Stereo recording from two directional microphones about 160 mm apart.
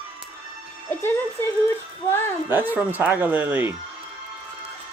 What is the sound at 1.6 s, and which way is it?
Speech, 15° left (ahead or behind).